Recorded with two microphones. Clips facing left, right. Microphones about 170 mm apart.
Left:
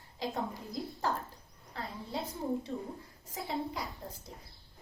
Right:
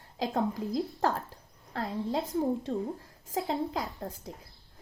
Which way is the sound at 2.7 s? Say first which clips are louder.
Right 7 dB; 90° right.